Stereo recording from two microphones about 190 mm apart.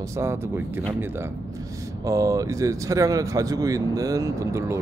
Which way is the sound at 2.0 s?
15° right (ahead or behind).